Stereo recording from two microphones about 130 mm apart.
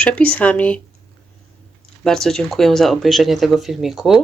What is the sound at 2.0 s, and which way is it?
Speech, 5° left (ahead or behind).